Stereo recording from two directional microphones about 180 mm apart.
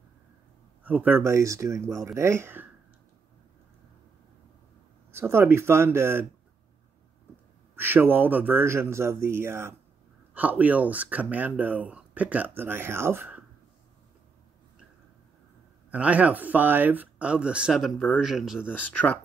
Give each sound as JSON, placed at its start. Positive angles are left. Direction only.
{"t": 0.8, "sound": "speech", "side_deg": -10}
{"t": 5.1, "sound": "speech", "side_deg": -15}
{"t": 7.7, "sound": "speech", "side_deg": -10}
{"t": 15.9, "sound": "speech", "side_deg": -5}
{"t": 18.7, "sound": "speech", "side_deg": 10}